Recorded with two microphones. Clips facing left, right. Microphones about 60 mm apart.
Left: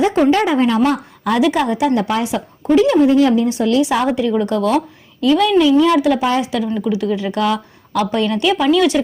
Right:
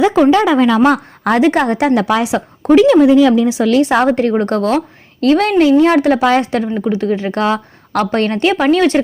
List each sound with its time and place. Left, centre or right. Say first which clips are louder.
0.8 s speech: right 4 dB; right
1.3 s a woman's voice: right 3 dB; right
2.0 s speech: right 4 dB; right
3.8 s a woman's voice: right 6 dB; right
6.1 s speech: right 5 dB; right
6.4 s a woman's voice: right 3 dB; right
6.7 s speech: right 2 dB; right
7.9 s a woman's voice: right 2 dB; right